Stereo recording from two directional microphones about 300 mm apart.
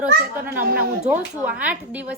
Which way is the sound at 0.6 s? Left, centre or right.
Right.